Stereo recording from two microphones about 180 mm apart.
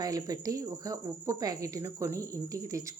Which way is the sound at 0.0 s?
20° right (ahead or behind).